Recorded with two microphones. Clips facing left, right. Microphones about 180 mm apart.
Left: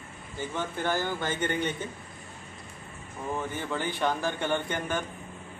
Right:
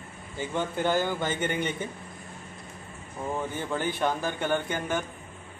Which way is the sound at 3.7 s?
10° right (ahead or behind).